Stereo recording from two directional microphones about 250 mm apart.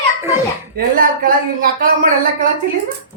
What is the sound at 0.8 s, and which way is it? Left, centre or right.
Speech, right.